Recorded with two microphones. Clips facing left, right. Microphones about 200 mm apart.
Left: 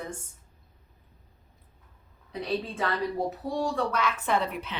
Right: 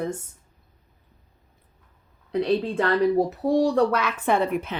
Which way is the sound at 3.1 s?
75° right (ahead or behind).